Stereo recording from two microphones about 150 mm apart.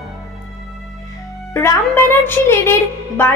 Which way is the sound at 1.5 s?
15° left (ahead or behind).